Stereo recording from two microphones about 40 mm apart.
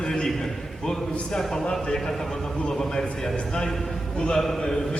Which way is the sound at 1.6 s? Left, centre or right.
Left.